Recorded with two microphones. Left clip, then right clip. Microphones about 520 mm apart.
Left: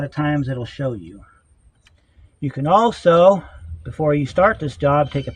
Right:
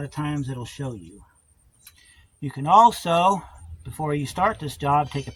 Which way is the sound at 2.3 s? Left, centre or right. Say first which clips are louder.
Even; right.